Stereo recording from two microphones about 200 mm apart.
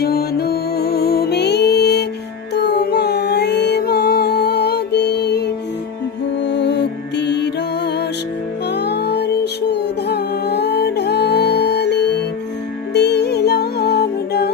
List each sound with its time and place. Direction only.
0.0 s music: 50° left (ahead or behind)
6.4 s music: 60° left (ahead or behind)
8.7 s music: 55° left (ahead or behind)